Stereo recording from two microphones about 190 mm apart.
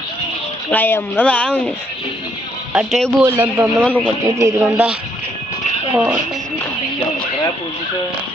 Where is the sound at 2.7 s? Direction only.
Centre (ahead or behind).